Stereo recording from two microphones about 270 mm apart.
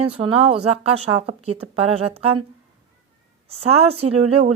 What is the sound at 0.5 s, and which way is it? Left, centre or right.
A woman's voice, right.